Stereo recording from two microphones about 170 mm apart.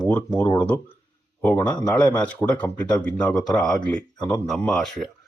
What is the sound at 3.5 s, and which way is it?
Speech, 5° left (ahead or behind).